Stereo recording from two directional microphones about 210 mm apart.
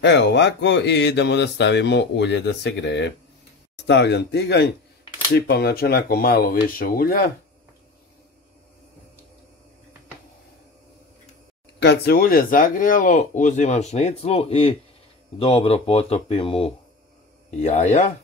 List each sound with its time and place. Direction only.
0.0 s speech: 55° left (ahead or behind)
11.8 s speech: 50° left (ahead or behind); by 18.1 s 35° left (ahead or behind)